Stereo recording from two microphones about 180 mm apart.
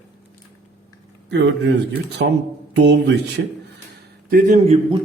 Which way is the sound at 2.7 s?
80° right.